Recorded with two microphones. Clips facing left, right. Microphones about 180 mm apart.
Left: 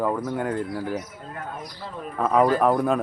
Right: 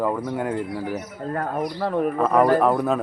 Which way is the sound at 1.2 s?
55° right (ahead or behind).